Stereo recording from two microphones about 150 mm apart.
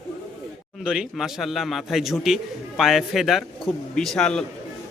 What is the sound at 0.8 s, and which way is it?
A man's voice, 5° right (ahead or behind).